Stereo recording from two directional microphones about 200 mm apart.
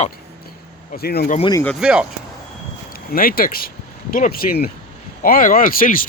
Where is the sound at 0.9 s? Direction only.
50° left (ahead or behind).